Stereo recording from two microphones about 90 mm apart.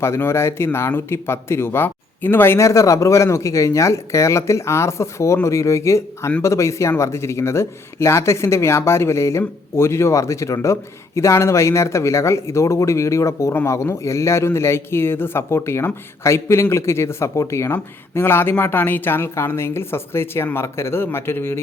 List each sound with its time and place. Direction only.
0.0 s a man's voice: 30° left (ahead or behind)